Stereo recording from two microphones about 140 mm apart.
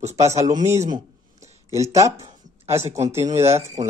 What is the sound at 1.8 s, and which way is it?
Speech, 20° right (ahead or behind).